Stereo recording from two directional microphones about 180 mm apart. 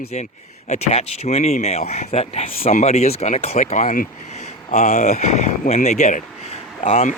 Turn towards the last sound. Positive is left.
turn(degrees=45)  # may be behind; listen again after turning